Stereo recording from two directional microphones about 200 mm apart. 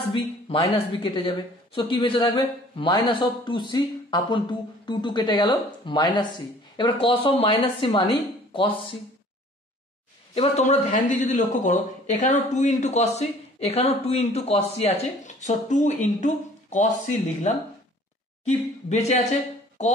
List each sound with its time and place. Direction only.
0.1 s a man's voice: 25° left (ahead or behind)
10.3 s speech: 30° left (ahead or behind)
17.5 s speech: 35° left (ahead or behind)